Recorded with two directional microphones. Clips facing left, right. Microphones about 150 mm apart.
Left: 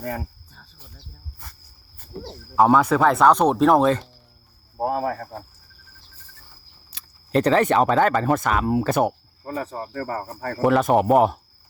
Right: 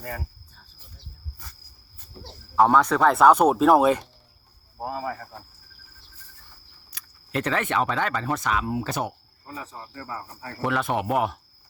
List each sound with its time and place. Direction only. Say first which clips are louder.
2.1 s speech: left 10 dB; 60° left (ahead or behind)
2.6 s speech: left 2 dB; 5° left (ahead or behind)
4.8 s speech: left 7 dB; 60° left (ahead or behind)
6.9 s speech: left 8 dB; 35° left (ahead or behind); by 10.5 s 55° left (ahead or behind)
10.6 s speech: left 8 dB; 40° left (ahead or behind)